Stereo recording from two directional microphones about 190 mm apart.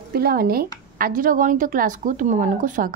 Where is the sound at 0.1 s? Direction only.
55° right (ahead or behind).